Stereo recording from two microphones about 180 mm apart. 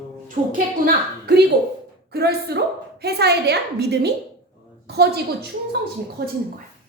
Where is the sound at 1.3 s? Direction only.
70° right (ahead or behind).